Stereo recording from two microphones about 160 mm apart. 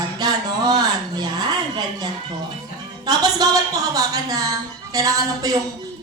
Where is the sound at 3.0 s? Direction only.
25° right (ahead or behind).